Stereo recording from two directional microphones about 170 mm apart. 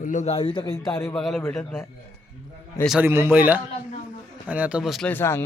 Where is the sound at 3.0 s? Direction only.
15° right (ahead or behind).